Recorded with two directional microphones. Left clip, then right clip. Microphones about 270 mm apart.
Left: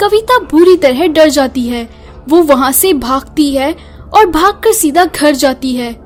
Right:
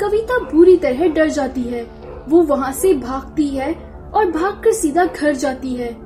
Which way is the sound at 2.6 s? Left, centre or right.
Left.